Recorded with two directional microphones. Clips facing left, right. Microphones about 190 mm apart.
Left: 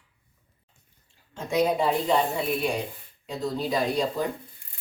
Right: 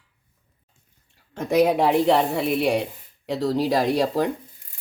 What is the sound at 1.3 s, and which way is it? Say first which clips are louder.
Speech: right 5 dB; 65° right (ahead or behind).